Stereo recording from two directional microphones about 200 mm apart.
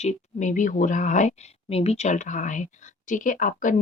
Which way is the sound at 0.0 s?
35° left (ahead or behind).